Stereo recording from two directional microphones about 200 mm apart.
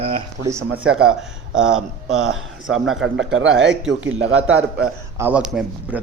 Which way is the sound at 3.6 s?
5° right (ahead or behind).